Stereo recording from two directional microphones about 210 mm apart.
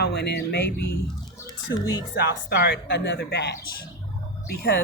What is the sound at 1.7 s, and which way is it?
Speech, 55° left (ahead or behind).